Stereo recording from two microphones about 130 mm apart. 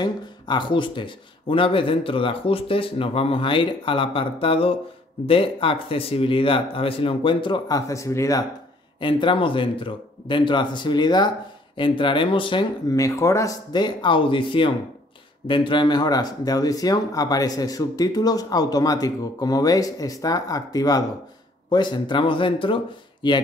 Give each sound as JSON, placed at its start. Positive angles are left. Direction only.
{"t": 0.0, "sound": "speech", "side_deg": 35}
{"t": 9.0, "sound": "speech", "side_deg": 40}
{"t": 12.9, "sound": "speech", "side_deg": 25}
{"t": 13.7, "sound": "speech", "side_deg": 35}